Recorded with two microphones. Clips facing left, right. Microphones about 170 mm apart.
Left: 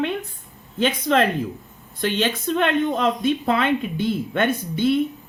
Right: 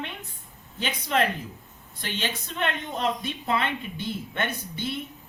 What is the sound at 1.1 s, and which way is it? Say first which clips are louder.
Speech: left 5 dB; 90° left.